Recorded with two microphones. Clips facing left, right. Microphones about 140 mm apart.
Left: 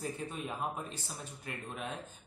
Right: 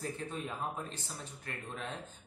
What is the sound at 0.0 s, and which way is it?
Speech, 15° left (ahead or behind).